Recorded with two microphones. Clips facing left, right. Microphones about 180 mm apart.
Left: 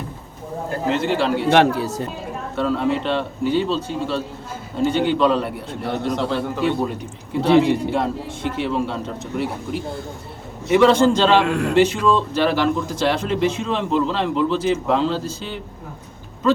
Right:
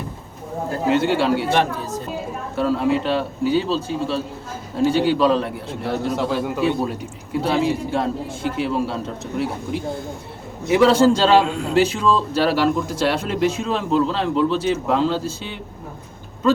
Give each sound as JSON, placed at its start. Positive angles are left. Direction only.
{"t": 0.9, "sound": "a man's voice", "side_deg": 0}
{"t": 1.5, "sound": "speech", "side_deg": 75}
{"t": 2.6, "sound": "a man's voice", "side_deg": -5}
{"t": 10.7, "sound": "a man's voice", "side_deg": -5}
{"t": 11.4, "sound": "speech", "side_deg": 65}
{"t": 11.7, "sound": "a man's voice", "side_deg": 0}